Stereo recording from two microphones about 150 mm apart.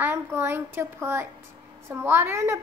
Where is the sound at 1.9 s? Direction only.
15° right (ahead or behind).